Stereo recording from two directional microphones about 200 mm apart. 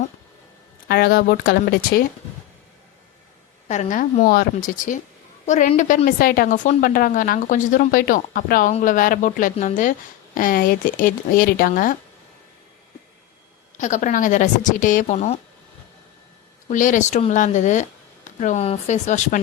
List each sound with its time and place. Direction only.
0.9 s speech: 50° left (ahead or behind)
3.7 s a woman's voice: 35° left (ahead or behind)
13.7 s a woman's voice: 40° left (ahead or behind)
16.6 s a woman's voice: 40° left (ahead or behind)